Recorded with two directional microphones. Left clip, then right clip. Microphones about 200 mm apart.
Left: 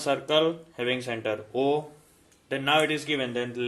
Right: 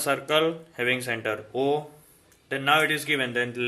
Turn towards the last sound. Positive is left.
turn(degrees=0)  # may be behind; listen again after turning